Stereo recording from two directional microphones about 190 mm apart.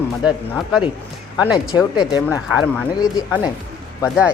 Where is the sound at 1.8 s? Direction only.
20° left (ahead or behind).